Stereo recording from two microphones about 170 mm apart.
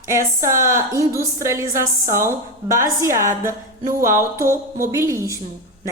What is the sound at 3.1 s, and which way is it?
Speech, 50° right (ahead or behind).